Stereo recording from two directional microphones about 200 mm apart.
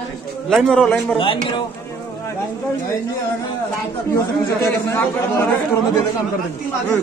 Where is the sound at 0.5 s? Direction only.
Centre (ahead or behind).